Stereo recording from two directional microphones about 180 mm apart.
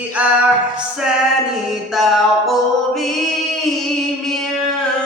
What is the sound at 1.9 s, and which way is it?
Music, centre (ahead or behind).